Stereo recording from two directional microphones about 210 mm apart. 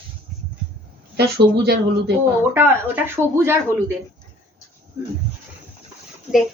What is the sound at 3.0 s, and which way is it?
Speech, 10° right (ahead or behind).